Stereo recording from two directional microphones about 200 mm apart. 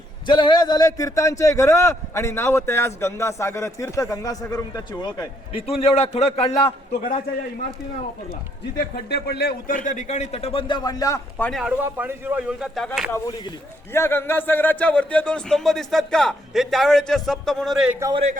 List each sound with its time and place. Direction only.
0.3 s a man's voice: 25° left (ahead or behind)
8.8 s a man's voice: 55° left (ahead or behind); by 11.6 s 5° left (ahead or behind)
11.6 s speech: 10° right (ahead or behind)
13.1 s a man's voice: 20° left (ahead or behind); by 17.9 s centre (ahead or behind)
18.0 s a man's voice: 30° right (ahead or behind)